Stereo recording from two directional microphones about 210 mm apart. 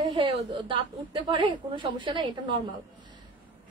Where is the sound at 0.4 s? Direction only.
25° right (ahead or behind).